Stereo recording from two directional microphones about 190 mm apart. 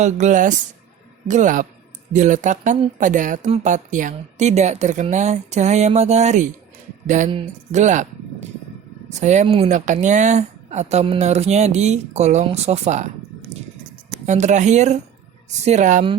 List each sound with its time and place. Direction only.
0.0 s speech: 40° right (ahead or behind)
14.3 s speech: 40° right (ahead or behind)